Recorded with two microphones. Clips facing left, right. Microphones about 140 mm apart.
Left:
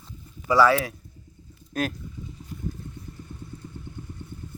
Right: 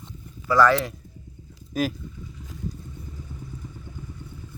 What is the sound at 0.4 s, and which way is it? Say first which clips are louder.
Speech: even; 10° left (ahead or behind).